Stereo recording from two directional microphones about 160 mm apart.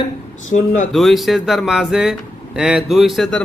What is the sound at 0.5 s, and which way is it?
Speech, 60° left (ahead or behind).